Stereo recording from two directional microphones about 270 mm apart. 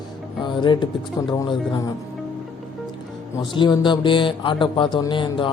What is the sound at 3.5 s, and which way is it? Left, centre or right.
Speech, centre.